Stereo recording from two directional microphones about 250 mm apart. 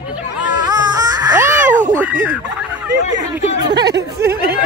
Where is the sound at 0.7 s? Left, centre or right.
Centre.